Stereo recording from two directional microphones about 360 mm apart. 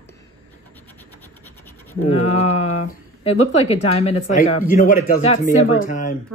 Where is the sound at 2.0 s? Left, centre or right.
Centre.